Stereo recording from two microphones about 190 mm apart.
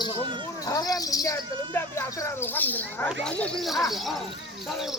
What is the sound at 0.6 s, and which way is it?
Cricket, 20° left (ahead or behind).